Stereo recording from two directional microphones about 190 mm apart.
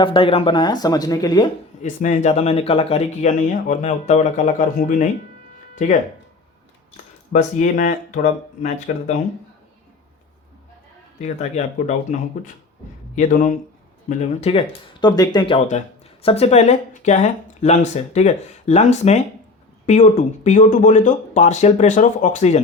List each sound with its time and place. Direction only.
0.0 s speech: 30° left (ahead or behind)
1.8 s speech: 40° left (ahead or behind)
6.9 s speech: 40° left (ahead or behind)
11.2 s speech: 35° left (ahead or behind)
14.2 s speech: 30° left (ahead or behind)
15.0 s speech: 20° left (ahead or behind); by 22.6 s 35° left (ahead or behind)